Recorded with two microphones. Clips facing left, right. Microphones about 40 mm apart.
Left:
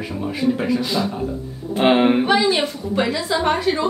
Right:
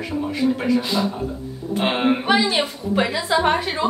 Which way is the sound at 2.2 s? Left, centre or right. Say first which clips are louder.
Left 1 dB; centre.